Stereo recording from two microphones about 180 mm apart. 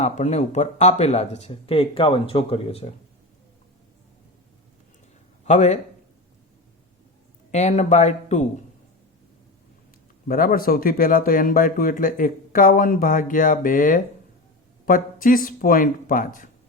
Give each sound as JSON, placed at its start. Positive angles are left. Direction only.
{"t": 0.0, "sound": "speech", "side_deg": 40}
{"t": 5.5, "sound": "speech", "side_deg": 40}
{"t": 7.5, "sound": "speech", "side_deg": 40}
{"t": 10.2, "sound": "speech", "side_deg": 50}